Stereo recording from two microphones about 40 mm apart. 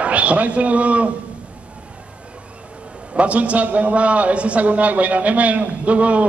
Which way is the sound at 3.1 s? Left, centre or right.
Right.